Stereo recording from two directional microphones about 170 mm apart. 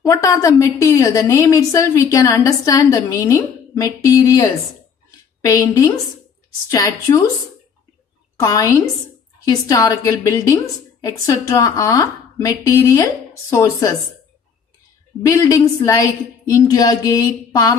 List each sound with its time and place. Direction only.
0.0 s a woman's voice: 20° left (ahead or behind)
8.4 s a woman's voice: 20° left (ahead or behind)
15.2 s a woman's voice: 20° left (ahead or behind)